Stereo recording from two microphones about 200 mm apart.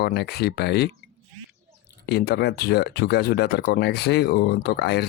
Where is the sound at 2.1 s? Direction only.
55° left (ahead or behind).